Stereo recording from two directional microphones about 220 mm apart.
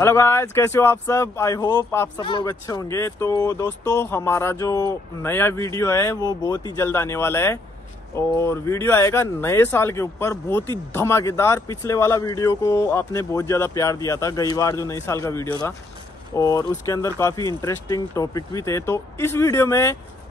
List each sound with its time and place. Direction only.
0.0 s speech: 10° left (ahead or behind)